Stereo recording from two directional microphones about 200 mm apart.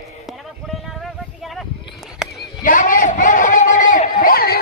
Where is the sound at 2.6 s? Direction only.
40° left (ahead or behind).